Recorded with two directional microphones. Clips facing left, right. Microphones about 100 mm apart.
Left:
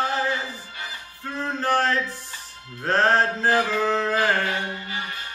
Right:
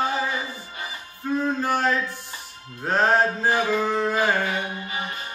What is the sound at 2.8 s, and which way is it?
Mantra, 10° right (ahead or behind).